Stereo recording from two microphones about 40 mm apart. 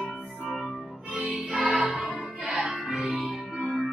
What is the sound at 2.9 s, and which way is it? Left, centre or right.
Music, right.